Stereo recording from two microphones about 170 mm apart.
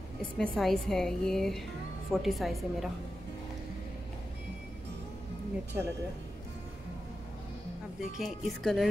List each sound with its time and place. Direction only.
0.4 s a woman's voice: centre (ahead or behind)
5.7 s speech: 10° right (ahead or behind)
8.2 s a woman's voice: centre (ahead or behind)